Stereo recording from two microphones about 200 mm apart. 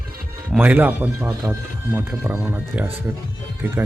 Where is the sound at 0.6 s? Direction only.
10° right (ahead or behind).